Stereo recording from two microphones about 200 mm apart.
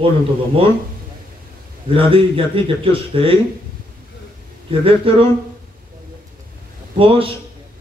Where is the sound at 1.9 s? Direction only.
25° right (ahead or behind).